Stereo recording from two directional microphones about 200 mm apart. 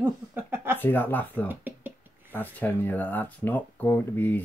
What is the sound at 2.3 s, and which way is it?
Speech, 10° left (ahead or behind).